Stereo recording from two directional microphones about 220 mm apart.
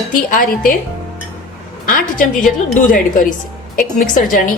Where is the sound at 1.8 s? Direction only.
40° left (ahead or behind).